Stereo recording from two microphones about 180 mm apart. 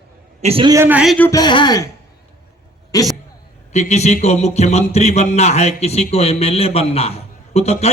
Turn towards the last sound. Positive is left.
turn(degrees=35)  # may be behind; listen again after turning